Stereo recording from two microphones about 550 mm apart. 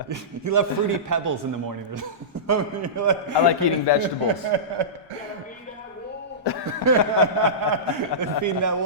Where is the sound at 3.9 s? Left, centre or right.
Left.